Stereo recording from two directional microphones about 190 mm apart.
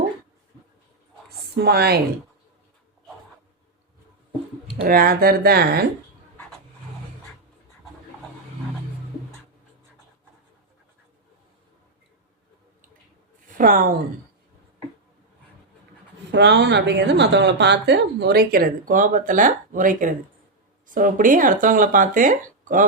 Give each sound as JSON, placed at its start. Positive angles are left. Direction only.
{"t": 1.5, "sound": "speech", "side_deg": -55}
{"t": 4.8, "sound": "speech", "side_deg": -50}
{"t": 13.6, "sound": "speech", "side_deg": -50}
{"t": 16.3, "sound": "speech", "side_deg": -65}